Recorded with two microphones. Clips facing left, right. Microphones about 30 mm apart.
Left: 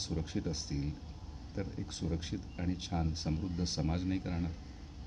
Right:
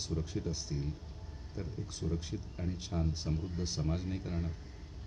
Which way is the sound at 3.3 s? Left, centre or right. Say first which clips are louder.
Even; centre.